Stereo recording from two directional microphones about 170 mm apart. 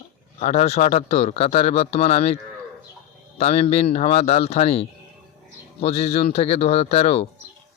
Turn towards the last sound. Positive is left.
turn(degrees=35)  # may be behind; listen again after turning